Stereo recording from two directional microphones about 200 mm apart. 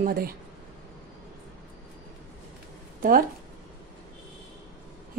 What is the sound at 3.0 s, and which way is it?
Speech, 45° right (ahead or behind).